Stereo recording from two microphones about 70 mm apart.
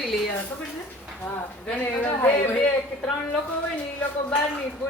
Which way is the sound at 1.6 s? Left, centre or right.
Left.